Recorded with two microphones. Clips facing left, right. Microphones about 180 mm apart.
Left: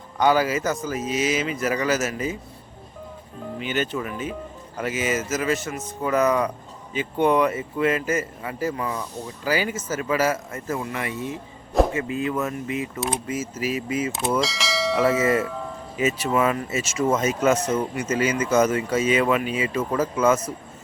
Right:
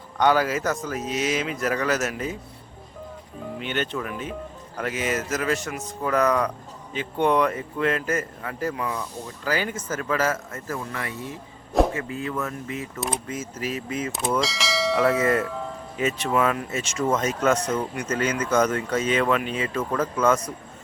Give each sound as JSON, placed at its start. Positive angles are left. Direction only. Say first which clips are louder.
{"t": 0.2, "sound": "speech", "louder": "left 1 dB", "side_deg": 0}
{"t": 3.6, "sound": "speech", "louder": "left 2 dB", "side_deg": 5}
{"t": 13.0, "sound": "speech", "louder": "left 3 dB", "side_deg": 5}